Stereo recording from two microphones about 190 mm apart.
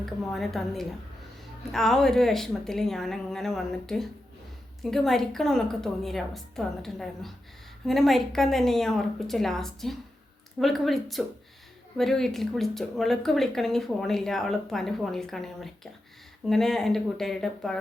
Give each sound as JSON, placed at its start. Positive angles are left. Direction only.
{"t": 0.0, "sound": "speech", "side_deg": 0}